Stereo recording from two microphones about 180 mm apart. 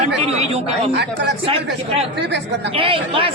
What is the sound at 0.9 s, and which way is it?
Speech, 70° right (ahead or behind).